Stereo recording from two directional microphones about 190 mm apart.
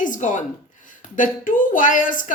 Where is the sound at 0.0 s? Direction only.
45° left (ahead or behind).